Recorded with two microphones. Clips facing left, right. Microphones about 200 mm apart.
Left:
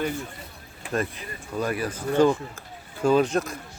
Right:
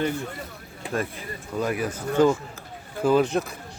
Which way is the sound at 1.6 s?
10° right (ahead or behind).